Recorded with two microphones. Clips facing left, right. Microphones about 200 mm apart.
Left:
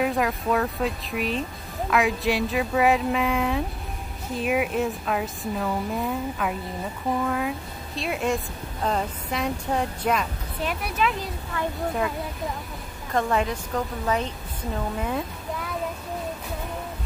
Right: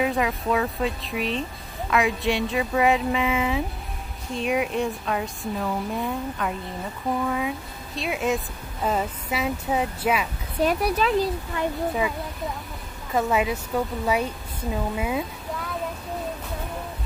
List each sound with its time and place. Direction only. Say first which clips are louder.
0.0 s a woman's voice: even; centre (ahead or behind)
10.6 s speech: right 5 dB; 40° right (ahead or behind)
13.1 s a woman's voice: right 1 dB; 5° right (ahead or behind)